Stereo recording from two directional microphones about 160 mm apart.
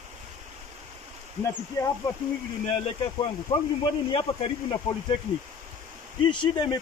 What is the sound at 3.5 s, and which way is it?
Speech, 30° left (ahead or behind).